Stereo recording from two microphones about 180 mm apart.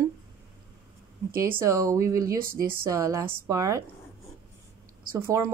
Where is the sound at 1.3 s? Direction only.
55° right (ahead or behind).